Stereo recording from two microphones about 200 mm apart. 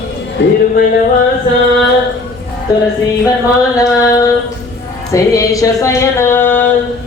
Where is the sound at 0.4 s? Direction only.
60° left (ahead or behind).